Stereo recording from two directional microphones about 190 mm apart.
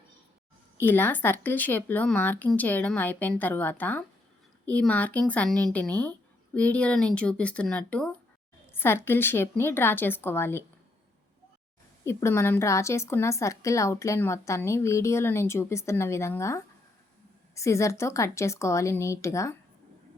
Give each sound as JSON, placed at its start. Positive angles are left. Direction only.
{"t": 0.8, "sound": "a woman's voice", "side_deg": 10}
{"t": 12.0, "sound": "a woman's voice", "side_deg": 15}